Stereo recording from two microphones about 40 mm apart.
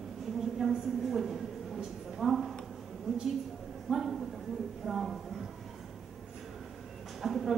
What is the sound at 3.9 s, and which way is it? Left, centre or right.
Speech, centre.